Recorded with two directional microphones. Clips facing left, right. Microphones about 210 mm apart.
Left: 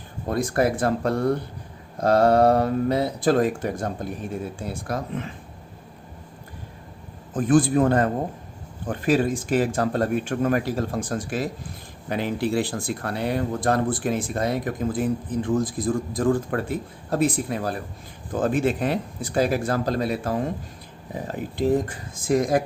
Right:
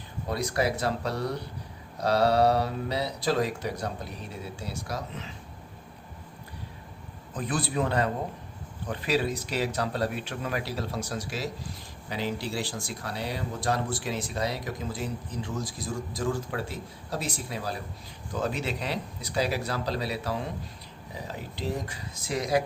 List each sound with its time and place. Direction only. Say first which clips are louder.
0.3 s speech: left 6 dB; 50° left (ahead or behind)
7.3 s speech: left 11 dB; 50° left (ahead or behind)